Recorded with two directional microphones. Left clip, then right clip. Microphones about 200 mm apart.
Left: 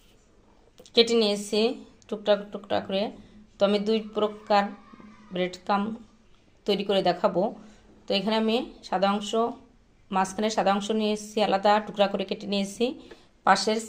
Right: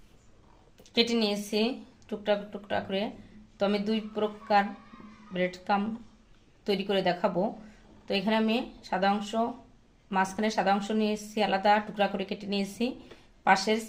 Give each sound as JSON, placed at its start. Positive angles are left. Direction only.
{"t": 0.8, "sound": "speech", "side_deg": 35}